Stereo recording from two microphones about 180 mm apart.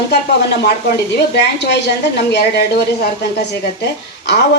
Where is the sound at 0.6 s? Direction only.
65° left (ahead or behind).